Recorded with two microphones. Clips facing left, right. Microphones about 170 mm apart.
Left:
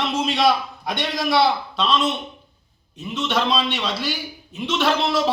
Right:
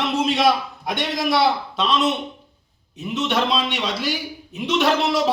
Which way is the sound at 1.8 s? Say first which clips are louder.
Right 1 dB; 15° right (ahead or behind).